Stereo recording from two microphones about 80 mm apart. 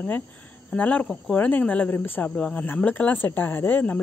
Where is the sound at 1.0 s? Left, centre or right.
Centre.